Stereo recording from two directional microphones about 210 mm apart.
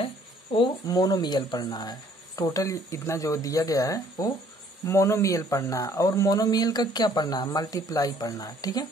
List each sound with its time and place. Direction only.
0.0 s speech: 25° left (ahead or behind)